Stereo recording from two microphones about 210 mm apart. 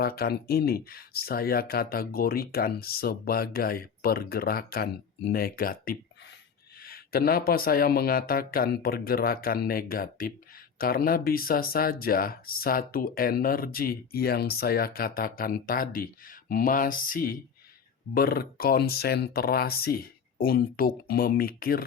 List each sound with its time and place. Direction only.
0.0 s speech: 45° left (ahead or behind)
16.5 s mantra: 45° left (ahead or behind)
18.1 s speech: 45° left (ahead or behind)